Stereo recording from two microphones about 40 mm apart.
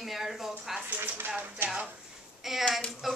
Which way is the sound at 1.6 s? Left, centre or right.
Right.